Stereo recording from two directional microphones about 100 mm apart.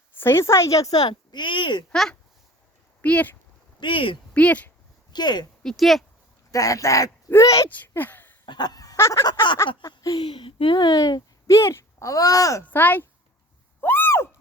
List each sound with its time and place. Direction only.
0.2 s speech: 25° left (ahead or behind); by 1.8 s 55° left (ahead or behind)
1.9 s speech: 5° left (ahead or behind)
3.0 s speech: 15° left (ahead or behind)
3.8 s speech: 55° left (ahead or behind)
4.4 s speech: 15° left (ahead or behind)
5.1 s speech: 45° left (ahead or behind)
5.6 s speech: centre (ahead or behind)
6.5 s speech: 35° left (ahead or behind)
7.7 s speech: 20° left (ahead or behind)
8.4 s fowl: 45° left (ahead or behind); by 9.2 s 30° left (ahead or behind)
9.2 s speech: 45° left (ahead or behind)
12.7 s speech: 20° left (ahead or behind)
13.8 s a sound: 20° left (ahead or behind)